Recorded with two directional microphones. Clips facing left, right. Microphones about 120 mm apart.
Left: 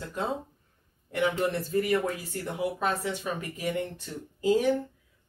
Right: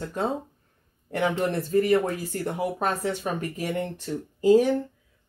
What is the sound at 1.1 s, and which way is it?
Speech, 35° right (ahead or behind).